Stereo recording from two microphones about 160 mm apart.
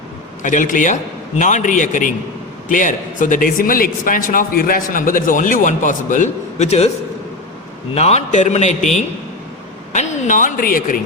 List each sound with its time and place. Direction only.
0.4 s a man's voice: 55° left (ahead or behind)
7.9 s a man's voice: 40° left (ahead or behind)
9.9 s speech: 45° left (ahead or behind); by 11.0 s 65° left (ahead or behind)